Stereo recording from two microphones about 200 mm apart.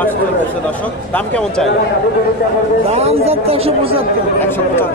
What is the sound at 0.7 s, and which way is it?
Speech, 5° left (ahead or behind).